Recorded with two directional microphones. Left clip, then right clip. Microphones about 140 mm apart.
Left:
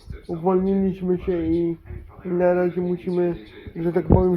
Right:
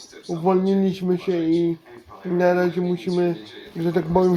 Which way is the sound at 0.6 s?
25° right (ahead or behind).